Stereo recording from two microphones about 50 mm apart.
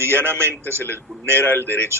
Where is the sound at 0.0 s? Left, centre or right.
Right.